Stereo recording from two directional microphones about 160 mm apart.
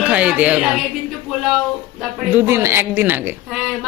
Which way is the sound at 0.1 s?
10° right (ahead or behind).